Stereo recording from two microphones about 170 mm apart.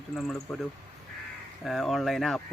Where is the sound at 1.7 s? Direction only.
Centre (ahead or behind).